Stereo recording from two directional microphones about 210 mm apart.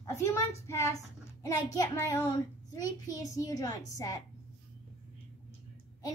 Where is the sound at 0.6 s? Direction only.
15° left (ahead or behind).